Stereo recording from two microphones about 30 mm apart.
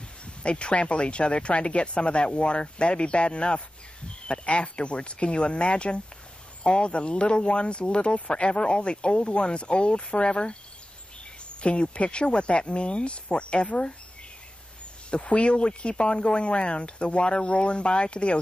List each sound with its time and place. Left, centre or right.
0.2 s speech: left
15.0 s speech: left